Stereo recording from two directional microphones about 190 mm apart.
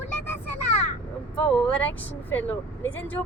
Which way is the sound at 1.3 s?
5° left (ahead or behind).